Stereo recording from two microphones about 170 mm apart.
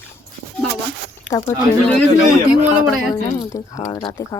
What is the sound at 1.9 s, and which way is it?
Speech, 5° left (ahead or behind).